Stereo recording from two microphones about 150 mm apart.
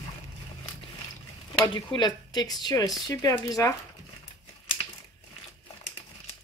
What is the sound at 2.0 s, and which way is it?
Speech, 30° left (ahead or behind).